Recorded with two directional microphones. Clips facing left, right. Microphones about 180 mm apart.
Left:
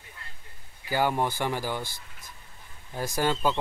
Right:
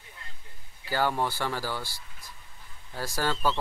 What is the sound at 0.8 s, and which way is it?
Speech, 15° left (ahead or behind).